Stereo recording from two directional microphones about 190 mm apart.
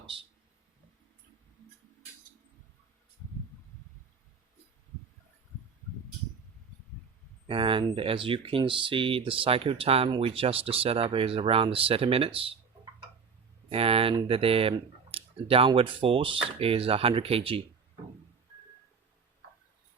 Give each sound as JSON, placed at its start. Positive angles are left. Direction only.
{"t": 7.4, "sound": "speech", "side_deg": -25}